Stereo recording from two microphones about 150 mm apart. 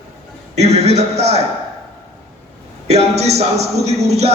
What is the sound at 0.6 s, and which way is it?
Speech, 45° right (ahead or behind).